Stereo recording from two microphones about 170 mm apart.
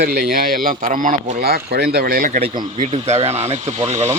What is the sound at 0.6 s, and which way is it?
Speech, 55° right (ahead or behind).